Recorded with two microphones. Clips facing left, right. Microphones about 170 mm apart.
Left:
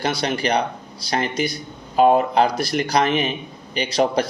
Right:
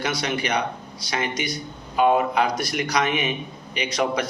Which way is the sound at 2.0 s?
40° left (ahead or behind).